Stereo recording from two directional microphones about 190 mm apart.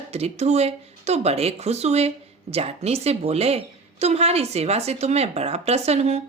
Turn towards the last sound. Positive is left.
turn(degrees=-35)  # may be behind; listen again after turning